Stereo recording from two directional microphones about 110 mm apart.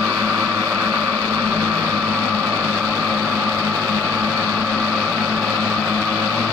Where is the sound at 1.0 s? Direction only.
10° right (ahead or behind).